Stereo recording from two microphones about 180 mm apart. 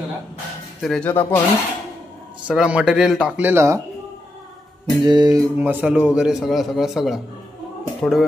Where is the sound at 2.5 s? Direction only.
5° right (ahead or behind).